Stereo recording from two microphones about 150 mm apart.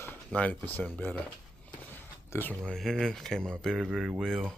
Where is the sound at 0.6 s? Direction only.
10° left (ahead or behind).